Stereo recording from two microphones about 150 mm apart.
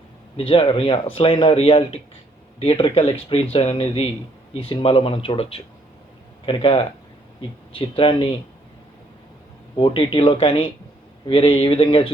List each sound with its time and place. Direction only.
0.3 s a man's voice: 40° left (ahead or behind)
9.7 s a man's voice: 35° left (ahead or behind)